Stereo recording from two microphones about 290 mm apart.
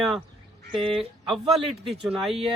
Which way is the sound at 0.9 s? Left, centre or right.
Centre.